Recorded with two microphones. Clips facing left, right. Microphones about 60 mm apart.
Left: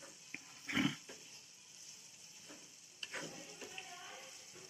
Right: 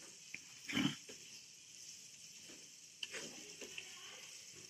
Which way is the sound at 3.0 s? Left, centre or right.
Left.